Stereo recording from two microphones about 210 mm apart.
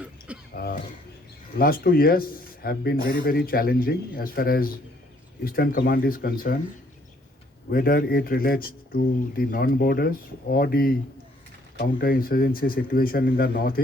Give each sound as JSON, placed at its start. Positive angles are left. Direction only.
{"t": 0.3, "sound": "cough", "side_deg": -5}
{"t": 1.5, "sound": "speech", "side_deg": 45}
{"t": 7.7, "sound": "speech", "side_deg": 45}